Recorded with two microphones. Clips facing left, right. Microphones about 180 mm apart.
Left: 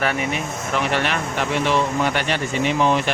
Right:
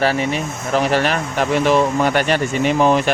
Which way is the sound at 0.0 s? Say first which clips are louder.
Right 4 dB; 30° right (ahead or behind).